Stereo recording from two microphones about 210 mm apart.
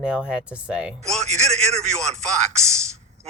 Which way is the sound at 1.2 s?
35° right (ahead or behind).